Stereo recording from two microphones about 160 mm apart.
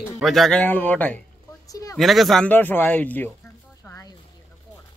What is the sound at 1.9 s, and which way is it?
Speech, centre (ahead or behind).